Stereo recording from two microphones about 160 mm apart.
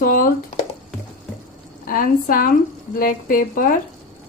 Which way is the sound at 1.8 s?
65° left (ahead or behind).